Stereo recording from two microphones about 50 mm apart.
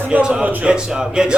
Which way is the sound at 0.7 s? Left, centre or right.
Centre.